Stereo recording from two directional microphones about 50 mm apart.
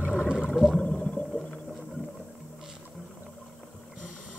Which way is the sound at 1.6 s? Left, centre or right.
Centre.